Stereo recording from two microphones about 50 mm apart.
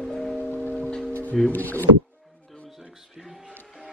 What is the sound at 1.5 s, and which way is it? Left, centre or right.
Speech, left.